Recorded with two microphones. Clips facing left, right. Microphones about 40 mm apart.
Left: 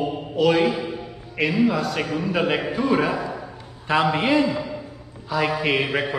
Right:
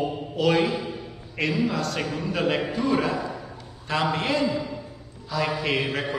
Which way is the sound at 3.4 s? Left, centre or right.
Centre.